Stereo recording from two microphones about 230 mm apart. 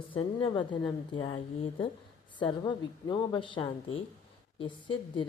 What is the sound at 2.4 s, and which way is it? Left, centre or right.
Speech, centre.